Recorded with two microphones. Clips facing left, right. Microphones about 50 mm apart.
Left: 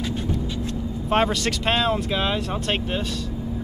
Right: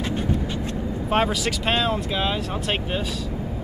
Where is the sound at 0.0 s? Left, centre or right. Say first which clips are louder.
Right 2 dB; right.